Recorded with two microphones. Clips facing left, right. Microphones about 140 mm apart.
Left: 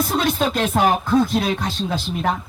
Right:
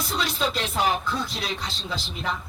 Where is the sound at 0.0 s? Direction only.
50° left (ahead or behind).